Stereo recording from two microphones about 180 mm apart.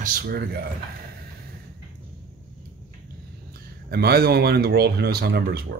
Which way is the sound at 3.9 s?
60° right (ahead or behind).